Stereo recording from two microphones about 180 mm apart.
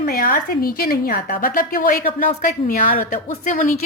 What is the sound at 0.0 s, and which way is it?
A woman's voice, 55° left (ahead or behind).